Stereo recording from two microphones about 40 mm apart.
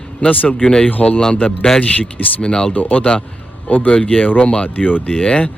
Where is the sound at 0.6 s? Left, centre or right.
Left.